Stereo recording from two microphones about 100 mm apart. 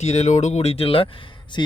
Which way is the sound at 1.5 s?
50° left (ahead or behind).